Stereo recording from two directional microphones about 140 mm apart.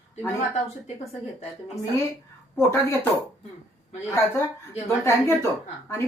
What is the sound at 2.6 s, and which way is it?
Speech, 15° left (ahead or behind).